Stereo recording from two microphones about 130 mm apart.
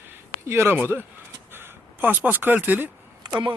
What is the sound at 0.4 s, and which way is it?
Speech, 20° right (ahead or behind).